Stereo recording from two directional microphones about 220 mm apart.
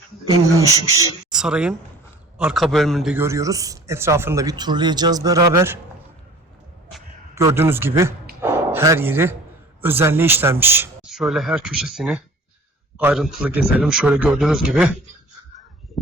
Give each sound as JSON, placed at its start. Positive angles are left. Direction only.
{"t": 0.3, "sound": "a man's voice", "side_deg": -15}
{"t": 1.3, "sound": "a man's voice", "side_deg": -5}
{"t": 7.3, "sound": "a man's voice", "side_deg": -10}